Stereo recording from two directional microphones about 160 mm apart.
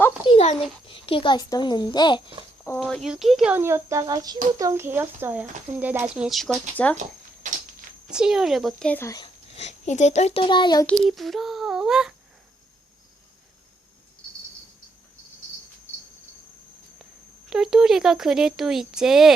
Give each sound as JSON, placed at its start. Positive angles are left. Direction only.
{"t": 0.3, "sound": "a sound", "side_deg": 40}
{"t": 0.9, "sound": "a child's voice", "side_deg": 35}
{"t": 2.8, "sound": "speech", "side_deg": 0}
{"t": 6.2, "sound": "speech", "side_deg": 0}
{"t": 7.4, "sound": "a sound", "side_deg": -55}
{"t": 8.1, "sound": "speech", "side_deg": -5}
{"t": 9.0, "sound": "a child's voice", "side_deg": 25}
{"t": 9.6, "sound": "a child's voice", "side_deg": 45}
{"t": 10.8, "sound": "speech", "side_deg": 0}
{"t": 17.5, "sound": "speech", "side_deg": -5}